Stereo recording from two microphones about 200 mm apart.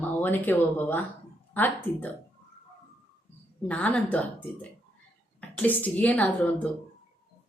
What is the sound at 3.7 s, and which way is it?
Speech, 5° left (ahead or behind).